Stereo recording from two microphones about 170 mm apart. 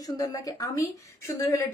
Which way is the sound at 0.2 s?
20° left (ahead or behind).